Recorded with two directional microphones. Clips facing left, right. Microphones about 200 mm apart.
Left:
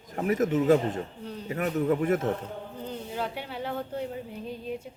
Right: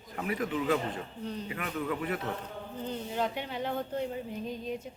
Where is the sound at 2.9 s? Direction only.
5° left (ahead or behind).